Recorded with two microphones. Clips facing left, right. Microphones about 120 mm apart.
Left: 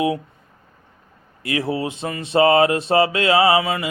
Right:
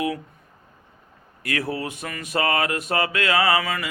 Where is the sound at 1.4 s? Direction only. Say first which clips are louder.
Left 4 dB; 25° left (ahead or behind).